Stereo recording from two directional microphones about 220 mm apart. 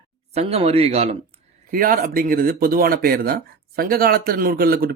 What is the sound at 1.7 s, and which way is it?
Speech, 40° right (ahead or behind).